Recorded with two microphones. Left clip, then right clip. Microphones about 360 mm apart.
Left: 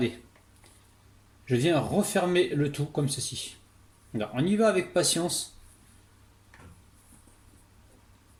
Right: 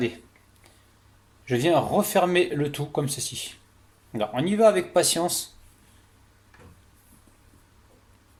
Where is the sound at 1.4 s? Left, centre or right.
Centre.